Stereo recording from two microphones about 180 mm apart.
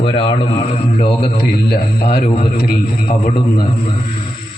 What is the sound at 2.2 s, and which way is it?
A man's voice, 30° left (ahead or behind).